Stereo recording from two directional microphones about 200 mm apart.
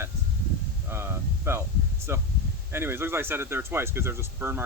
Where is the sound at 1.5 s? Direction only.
10° right (ahead or behind).